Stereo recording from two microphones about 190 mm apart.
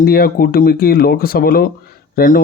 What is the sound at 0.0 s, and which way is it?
Speech, 50° left (ahead or behind).